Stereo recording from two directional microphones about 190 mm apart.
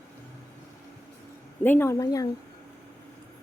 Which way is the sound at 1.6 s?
10° left (ahead or behind).